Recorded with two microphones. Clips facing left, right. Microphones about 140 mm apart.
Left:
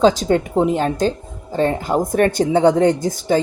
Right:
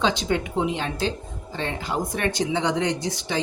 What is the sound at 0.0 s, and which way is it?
Speech, 40° left (ahead or behind).